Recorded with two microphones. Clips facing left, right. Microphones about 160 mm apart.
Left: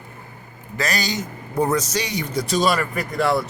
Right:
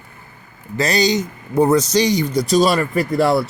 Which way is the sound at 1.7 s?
30° right (ahead or behind).